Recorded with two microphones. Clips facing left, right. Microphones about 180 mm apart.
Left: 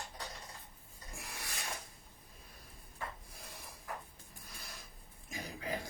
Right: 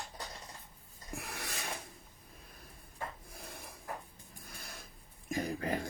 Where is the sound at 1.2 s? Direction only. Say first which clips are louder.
Right 5 dB; 65° right (ahead or behind).